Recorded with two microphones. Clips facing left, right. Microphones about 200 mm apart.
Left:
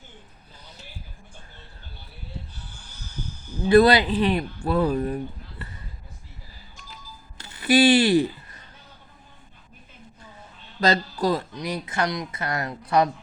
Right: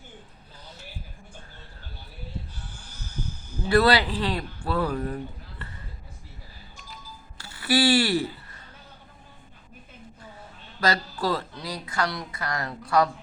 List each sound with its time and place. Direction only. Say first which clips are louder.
3.7 s speech: left 5 dB; 20° left (ahead or behind)
7.3 s a sound: left 5 dB; 20° left (ahead or behind)
10.8 s speech: left 4 dB; 20° left (ahead or behind)